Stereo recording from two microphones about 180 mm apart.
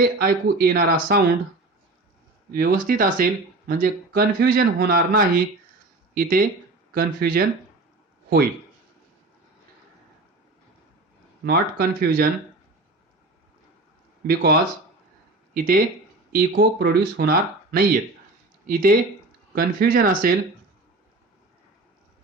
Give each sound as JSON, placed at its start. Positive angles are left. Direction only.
{"t": 0.0, "sound": "speech", "side_deg": -55}
{"t": 2.5, "sound": "speech", "side_deg": -50}
{"t": 11.4, "sound": "speech", "side_deg": -60}
{"t": 14.3, "sound": "speech", "side_deg": -60}